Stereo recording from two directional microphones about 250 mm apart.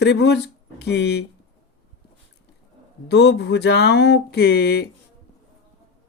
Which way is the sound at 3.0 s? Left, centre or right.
Left.